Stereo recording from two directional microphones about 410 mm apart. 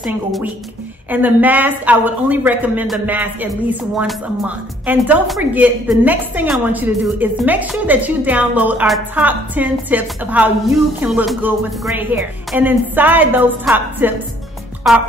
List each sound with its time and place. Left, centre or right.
0.0 s speech: centre